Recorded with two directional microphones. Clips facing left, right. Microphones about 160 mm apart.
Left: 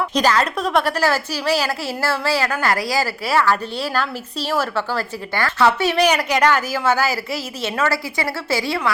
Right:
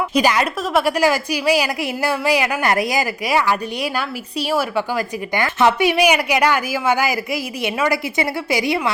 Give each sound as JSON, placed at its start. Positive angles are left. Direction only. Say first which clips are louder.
{"t": 0.1, "sound": "a woman's voice", "louder": "right 1 dB", "side_deg": -10}